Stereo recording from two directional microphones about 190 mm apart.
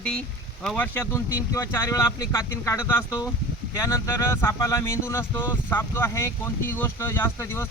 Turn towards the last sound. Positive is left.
turn(degrees=15)  # may be behind; listen again after turning